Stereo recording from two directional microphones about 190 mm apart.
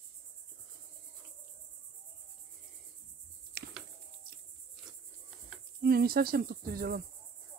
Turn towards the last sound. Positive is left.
turn(degrees=-55)  # may be behind; listen again after turning